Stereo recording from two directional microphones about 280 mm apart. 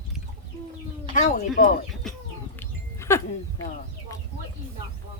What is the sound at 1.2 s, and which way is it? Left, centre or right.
Speech, left.